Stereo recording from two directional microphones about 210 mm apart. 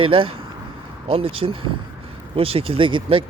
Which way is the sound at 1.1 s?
25° right (ahead or behind).